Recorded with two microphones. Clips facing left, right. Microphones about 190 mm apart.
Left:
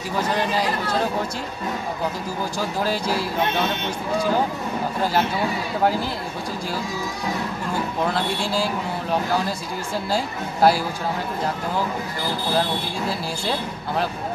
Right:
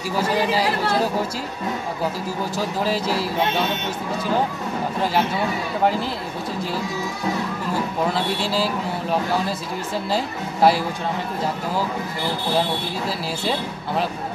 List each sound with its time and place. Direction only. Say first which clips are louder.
0.1 s speech: right 2 dB; 5° right (ahead or behind)
2.8 s a woman's voice: right 1 dB; centre (ahead or behind)
8.0 s a woman's voice: even; 5° right (ahead or behind)
10.1 s a woman's voice: right 1 dB; centre (ahead or behind)
13.4 s a woman's voice: right 1 dB; centre (ahead or behind)